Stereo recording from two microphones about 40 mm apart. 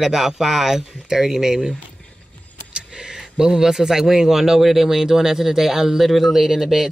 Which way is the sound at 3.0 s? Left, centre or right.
Centre.